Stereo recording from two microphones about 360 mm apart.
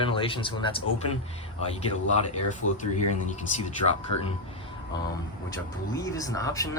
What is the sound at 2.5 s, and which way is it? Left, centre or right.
Speech, centre.